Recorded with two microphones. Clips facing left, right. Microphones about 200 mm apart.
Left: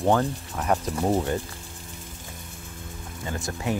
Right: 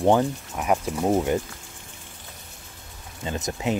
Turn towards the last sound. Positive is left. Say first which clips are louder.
# right 2 dB
turn(degrees=-20)  # may be behind; listen again after turning